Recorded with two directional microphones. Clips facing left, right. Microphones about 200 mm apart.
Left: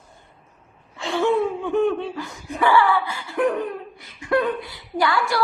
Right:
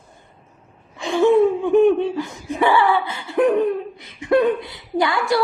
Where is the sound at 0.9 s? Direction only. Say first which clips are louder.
Right 6 dB; 15° right (ahead or behind).